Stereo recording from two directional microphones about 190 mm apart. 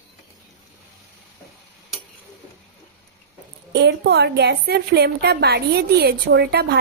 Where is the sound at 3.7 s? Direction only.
65° right (ahead or behind).